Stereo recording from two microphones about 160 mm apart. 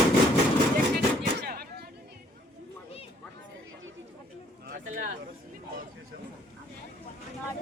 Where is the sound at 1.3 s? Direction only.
70° right (ahead or behind).